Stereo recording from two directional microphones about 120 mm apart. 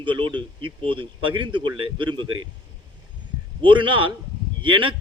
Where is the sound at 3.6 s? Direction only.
45° right (ahead or behind).